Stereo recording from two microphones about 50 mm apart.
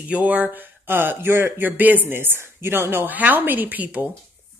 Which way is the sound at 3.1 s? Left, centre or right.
Right.